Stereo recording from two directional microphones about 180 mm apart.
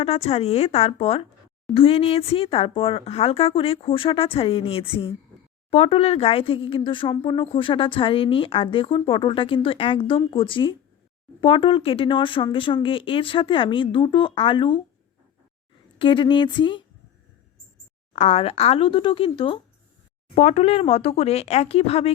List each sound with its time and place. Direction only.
0.0 s speech: 35° left (ahead or behind)
16.0 s speech: 25° left (ahead or behind)
18.1 s speech: 40° left (ahead or behind)